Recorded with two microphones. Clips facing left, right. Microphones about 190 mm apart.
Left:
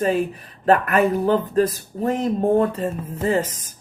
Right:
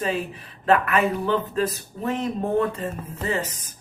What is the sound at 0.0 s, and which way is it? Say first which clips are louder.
Speech: left 6 dB; 45° left (ahead or behind).